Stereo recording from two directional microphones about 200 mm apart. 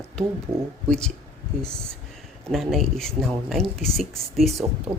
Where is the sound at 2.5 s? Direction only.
Centre (ahead or behind).